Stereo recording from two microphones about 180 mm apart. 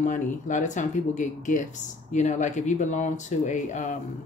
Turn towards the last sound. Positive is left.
turn(degrees=45)  # may be behind; listen again after turning